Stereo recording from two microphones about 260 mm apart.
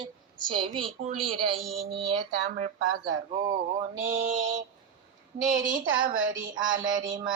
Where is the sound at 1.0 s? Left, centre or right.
Right.